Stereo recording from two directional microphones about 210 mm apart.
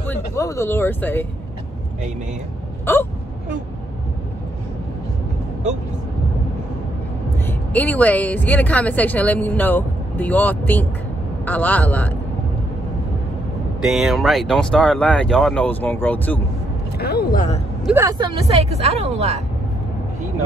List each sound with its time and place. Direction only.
0.0 s speech: 10° left (ahead or behind)
2.8 s hiccup: 10° left (ahead or behind)
7.4 s speech: 10° left (ahead or behind)
13.8 s speech: centre (ahead or behind)
17.0 s speech: 50° left (ahead or behind)
17.8 s speech: 15° right (ahead or behind)
18.8 s speech: 30° right (ahead or behind)